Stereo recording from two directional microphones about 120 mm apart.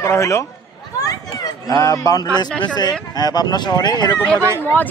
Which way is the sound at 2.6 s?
35° left (ahead or behind).